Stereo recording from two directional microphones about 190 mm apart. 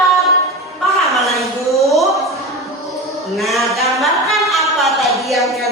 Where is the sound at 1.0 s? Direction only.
Centre (ahead or behind).